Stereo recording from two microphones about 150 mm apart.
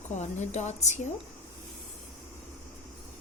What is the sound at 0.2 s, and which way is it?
Speech, 50° left (ahead or behind).